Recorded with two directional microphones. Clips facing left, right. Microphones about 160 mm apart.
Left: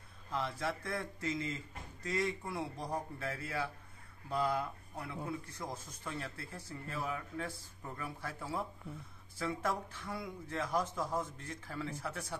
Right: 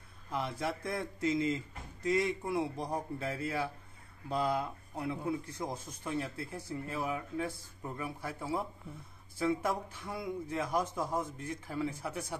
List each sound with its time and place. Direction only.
0.3 s speech: 15° right (ahead or behind)